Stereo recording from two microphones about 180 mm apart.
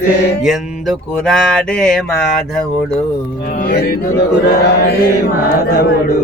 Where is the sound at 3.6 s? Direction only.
55° left (ahead or behind).